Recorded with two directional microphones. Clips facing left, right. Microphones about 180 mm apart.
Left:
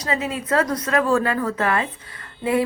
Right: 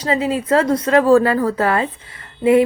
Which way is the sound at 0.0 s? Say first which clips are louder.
Right 6 dB; 30° right (ahead or behind).